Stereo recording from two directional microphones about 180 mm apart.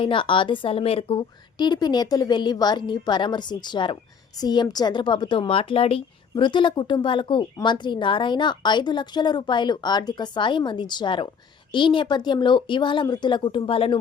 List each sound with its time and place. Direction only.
0.0 s a woman's voice: 30° left (ahead or behind)